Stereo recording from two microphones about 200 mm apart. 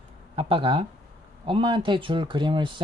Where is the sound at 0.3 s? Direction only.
30° right (ahead or behind).